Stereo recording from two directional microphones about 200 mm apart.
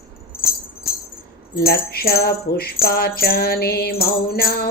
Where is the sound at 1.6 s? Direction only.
50° left (ahead or behind).